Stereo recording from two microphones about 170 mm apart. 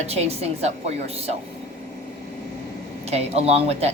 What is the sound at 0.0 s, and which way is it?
A woman's voice, 40° right (ahead or behind).